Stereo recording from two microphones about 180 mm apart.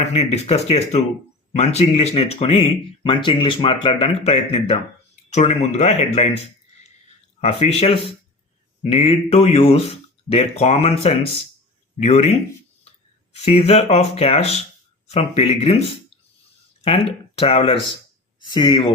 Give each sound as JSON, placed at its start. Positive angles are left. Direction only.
{"t": 0.0, "sound": "speech", "side_deg": 35}
{"t": 7.4, "sound": "speech", "side_deg": 35}
{"t": 13.3, "sound": "speech", "side_deg": 35}